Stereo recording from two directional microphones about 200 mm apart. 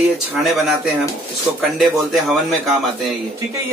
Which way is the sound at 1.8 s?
Centre (ahead or behind).